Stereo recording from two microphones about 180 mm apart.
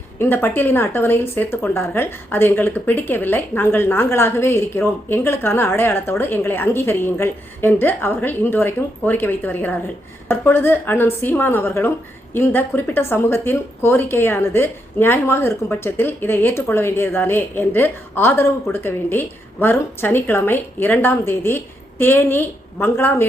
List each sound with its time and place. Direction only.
0.2 s speech: 10° left (ahead or behind)